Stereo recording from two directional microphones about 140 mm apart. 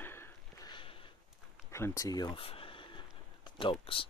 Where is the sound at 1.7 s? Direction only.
20° left (ahead or behind); by 4.0 s 40° left (ahead or behind).